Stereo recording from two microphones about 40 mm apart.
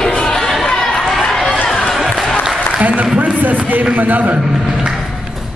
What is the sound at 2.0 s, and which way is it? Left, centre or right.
Applause, centre.